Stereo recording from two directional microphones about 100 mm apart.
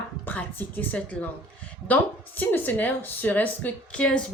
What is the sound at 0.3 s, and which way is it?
A woman's voice, 15° left (ahead or behind).